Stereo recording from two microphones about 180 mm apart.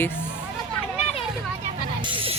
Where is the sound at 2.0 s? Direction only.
30° right (ahead or behind).